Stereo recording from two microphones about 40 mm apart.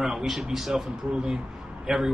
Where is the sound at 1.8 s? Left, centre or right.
Centre.